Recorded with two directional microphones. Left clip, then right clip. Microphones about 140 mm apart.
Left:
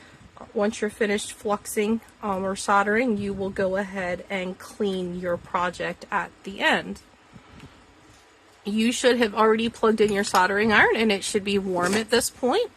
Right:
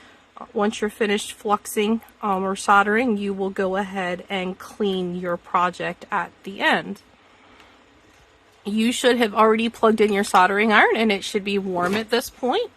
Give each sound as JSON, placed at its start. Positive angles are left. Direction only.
{"t": 0.5, "sound": "a woman's voice", "side_deg": -45}
{"t": 8.6, "sound": "a woman's voice", "side_deg": -30}